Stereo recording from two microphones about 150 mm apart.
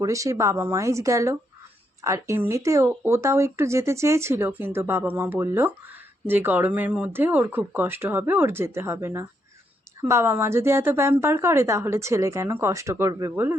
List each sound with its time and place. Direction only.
0.0 s speech: 20° right (ahead or behind)
13.3 s speech: 15° right (ahead or behind)